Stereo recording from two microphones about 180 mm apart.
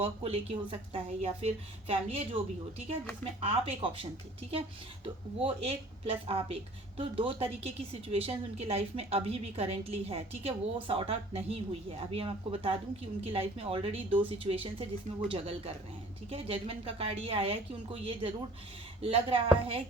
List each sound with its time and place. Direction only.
0.0 s speech: 35° right (ahead or behind)
5.5 s speech: 30° right (ahead or behind)